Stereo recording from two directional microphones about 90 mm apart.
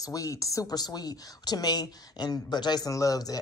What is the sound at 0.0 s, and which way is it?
Speech, 40° left (ahead or behind).